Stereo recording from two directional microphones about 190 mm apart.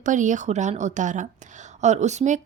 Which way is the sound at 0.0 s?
40° right (ahead or behind).